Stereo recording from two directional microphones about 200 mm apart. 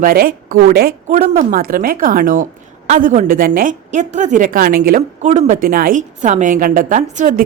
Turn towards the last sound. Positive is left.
turn(degrees=-40)  # may be behind; listen again after turning